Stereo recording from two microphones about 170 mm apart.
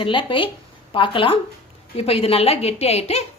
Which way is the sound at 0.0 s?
30° left (ahead or behind).